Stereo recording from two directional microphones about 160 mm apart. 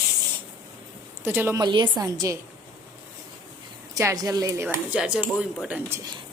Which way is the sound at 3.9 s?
20° right (ahead or behind).